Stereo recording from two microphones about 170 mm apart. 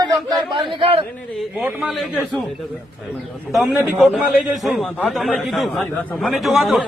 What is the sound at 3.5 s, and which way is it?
A man's voice, centre (ahead or behind).